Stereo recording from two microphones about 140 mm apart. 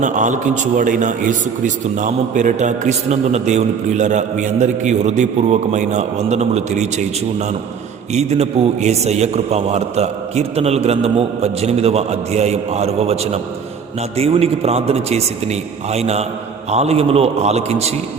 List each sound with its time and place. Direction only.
0.0 s a man's voice: 60° right (ahead or behind)